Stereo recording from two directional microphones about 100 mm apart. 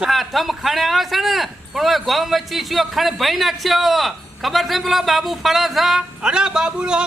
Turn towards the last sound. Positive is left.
turn(degrees=-10)  # may be behind; listen again after turning